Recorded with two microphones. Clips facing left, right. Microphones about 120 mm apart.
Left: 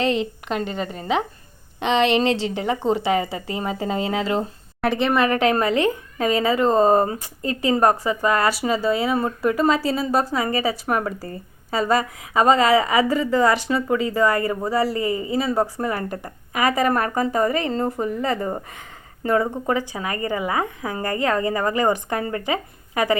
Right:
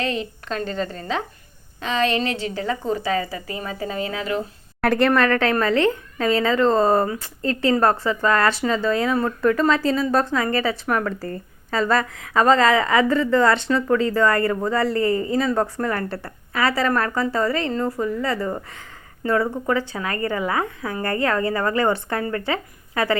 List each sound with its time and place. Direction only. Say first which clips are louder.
0.0 s a woman's voice: left 4 dB; 25° left (ahead or behind)
0.4 s a woman's voice: even; 15° left (ahead or behind)
4.8 s a woman's voice: right 2 dB; centre (ahead or behind)
10.8 s a woman's voice: even; 25° left (ahead or behind)
11.3 s a woman's voice: right 1 dB; 10° left (ahead or behind)